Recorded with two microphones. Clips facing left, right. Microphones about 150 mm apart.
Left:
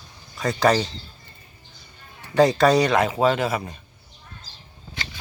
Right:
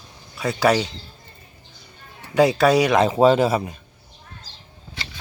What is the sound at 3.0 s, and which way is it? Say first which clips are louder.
Speech: right 5 dB; 30° right (ahead or behind).